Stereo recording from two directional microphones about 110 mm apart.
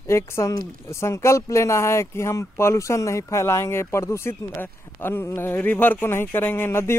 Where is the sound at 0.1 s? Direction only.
25° left (ahead or behind).